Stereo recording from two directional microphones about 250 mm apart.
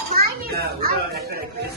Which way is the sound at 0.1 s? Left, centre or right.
Right.